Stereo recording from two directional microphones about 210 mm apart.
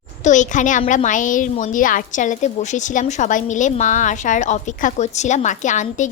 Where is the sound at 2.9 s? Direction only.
35° left (ahead or behind).